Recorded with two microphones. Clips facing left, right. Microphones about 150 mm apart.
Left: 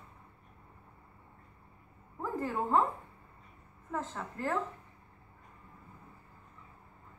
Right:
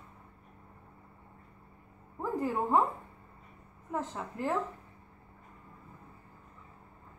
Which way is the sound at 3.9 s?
15° right (ahead or behind).